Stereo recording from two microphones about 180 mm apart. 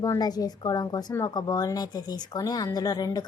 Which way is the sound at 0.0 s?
20° left (ahead or behind).